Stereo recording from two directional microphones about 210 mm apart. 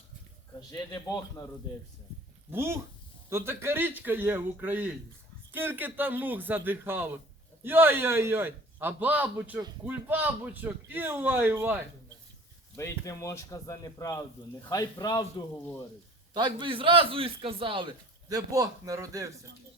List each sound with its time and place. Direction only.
0.7 s speech: 15° left (ahead or behind)
2.5 s a man's voice: 10° right (ahead or behind)
12.7 s speech: 15° left (ahead or behind)
16.3 s a man's voice: 20° right (ahead or behind)